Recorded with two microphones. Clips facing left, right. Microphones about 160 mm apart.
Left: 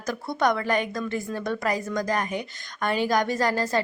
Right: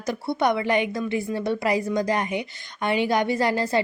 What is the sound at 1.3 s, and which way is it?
Speech, 25° right (ahead or behind).